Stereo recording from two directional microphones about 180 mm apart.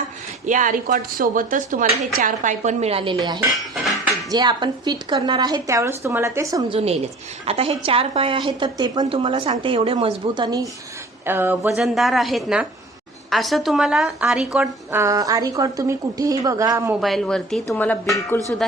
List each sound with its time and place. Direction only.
0.4 s a woman's voice: 45° right (ahead or behind); by 6.7 s 20° right (ahead or behind)
7.4 s a woman's voice: 35° right (ahead or behind)
11.3 s speech: 10° right (ahead or behind)
11.9 s a woman's voice: centre (ahead or behind)
15.0 s a woman's voice: 20° right (ahead or behind)
17.0 s a woman's voice: centre (ahead or behind)